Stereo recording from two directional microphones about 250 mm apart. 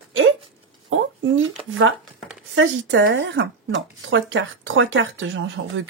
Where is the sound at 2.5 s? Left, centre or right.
Right.